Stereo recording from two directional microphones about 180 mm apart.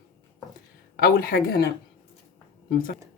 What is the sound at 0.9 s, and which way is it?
Speech, 55° left (ahead or behind).